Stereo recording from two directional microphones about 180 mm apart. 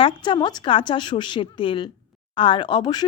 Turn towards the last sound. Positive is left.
turn(degrees=25)  # may be behind; listen again after turning